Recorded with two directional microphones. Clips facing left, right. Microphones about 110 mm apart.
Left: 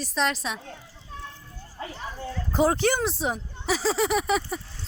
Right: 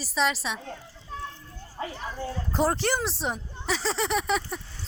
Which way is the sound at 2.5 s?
Centre (ahead or behind).